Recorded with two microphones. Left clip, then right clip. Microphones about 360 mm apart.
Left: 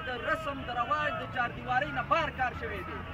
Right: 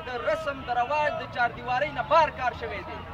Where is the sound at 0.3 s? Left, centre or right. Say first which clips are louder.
Right 6 dB; centre.